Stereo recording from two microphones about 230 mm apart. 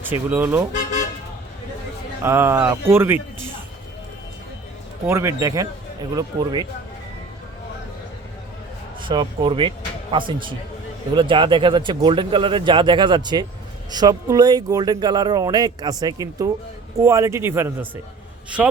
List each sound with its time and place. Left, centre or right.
0.0 s speech: centre
2.2 s speech: centre
5.0 s speech: centre
9.0 s speech: right; by 18.7 s centre